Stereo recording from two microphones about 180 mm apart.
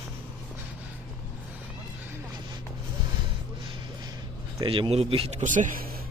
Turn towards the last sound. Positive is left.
turn(degrees=-45)  # may be behind; listen again after turning